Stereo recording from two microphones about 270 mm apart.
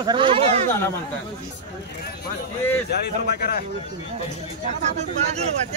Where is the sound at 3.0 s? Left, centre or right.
Left.